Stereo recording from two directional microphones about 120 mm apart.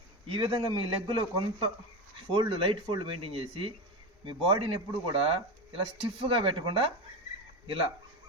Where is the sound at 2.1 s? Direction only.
45° right (ahead or behind).